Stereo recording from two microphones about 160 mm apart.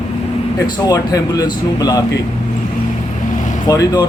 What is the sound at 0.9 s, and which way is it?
Speech, 20° left (ahead or behind).